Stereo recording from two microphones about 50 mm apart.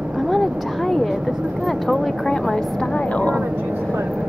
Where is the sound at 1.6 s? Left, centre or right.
Centre.